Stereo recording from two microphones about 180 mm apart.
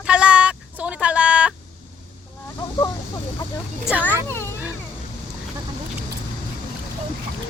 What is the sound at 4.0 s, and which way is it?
Speech, 10° left (ahead or behind).